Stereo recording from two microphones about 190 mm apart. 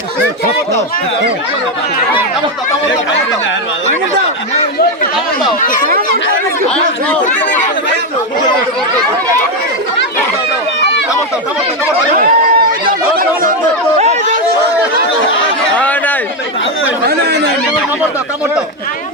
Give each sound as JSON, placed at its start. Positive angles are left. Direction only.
{"t": 12.1, "sound": "chatter", "side_deg": -50}
{"t": 14.0, "sound": "chatter", "side_deg": -35}
{"t": 15.8, "sound": "chatter", "side_deg": 10}